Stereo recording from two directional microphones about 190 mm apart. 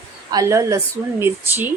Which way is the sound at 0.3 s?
15° right (ahead or behind).